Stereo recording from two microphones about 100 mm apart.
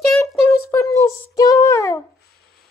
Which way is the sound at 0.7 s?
30° left (ahead or behind).